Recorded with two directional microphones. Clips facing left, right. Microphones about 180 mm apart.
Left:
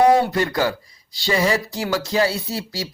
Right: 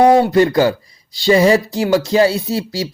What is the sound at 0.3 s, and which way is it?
Speech, 25° right (ahead or behind).